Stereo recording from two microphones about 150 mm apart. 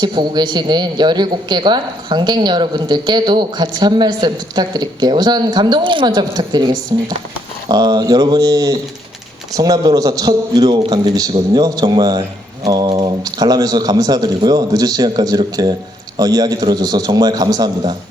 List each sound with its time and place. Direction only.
0.0 s a woman's voice: 30° right (ahead or behind)